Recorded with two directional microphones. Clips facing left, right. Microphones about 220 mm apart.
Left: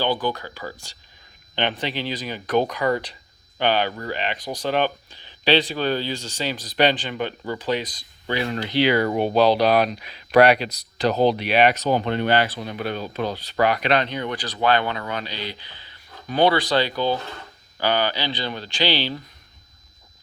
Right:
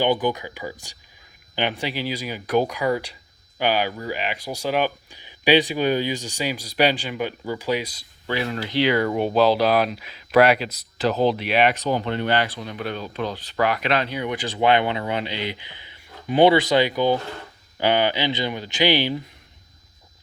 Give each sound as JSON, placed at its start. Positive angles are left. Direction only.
{"t": 0.0, "sound": "speech", "side_deg": -20}
{"t": 9.0, "sound": "speech", "side_deg": 35}
{"t": 9.3, "sound": "speech", "side_deg": -5}
{"t": 11.6, "sound": "speech", "side_deg": 40}
{"t": 13.3, "sound": "speech", "side_deg": 0}
{"t": 14.4, "sound": "speech", "side_deg": -25}